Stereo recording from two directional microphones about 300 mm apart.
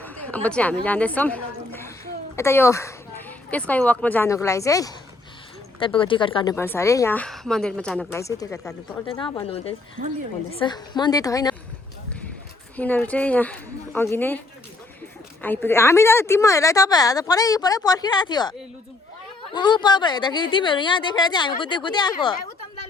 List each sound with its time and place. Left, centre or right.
0.0 s a woman's voice: centre
10.0 s a woman's voice: right
10.5 s a woman's voice: centre
12.7 s a woman's voice: centre